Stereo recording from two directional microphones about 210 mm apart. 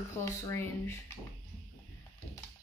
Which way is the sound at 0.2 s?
15° left (ahead or behind).